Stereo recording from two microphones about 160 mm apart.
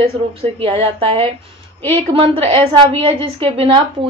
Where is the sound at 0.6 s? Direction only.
35° right (ahead or behind).